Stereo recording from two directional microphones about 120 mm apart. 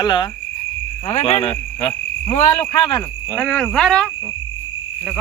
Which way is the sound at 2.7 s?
40° left (ahead or behind).